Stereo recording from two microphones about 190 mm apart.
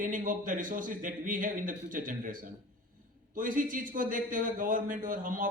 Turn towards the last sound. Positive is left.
turn(degrees=-45)  # may be behind; listen again after turning